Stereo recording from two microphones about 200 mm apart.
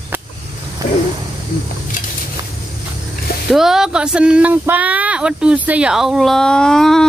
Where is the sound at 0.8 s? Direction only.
15° right (ahead or behind).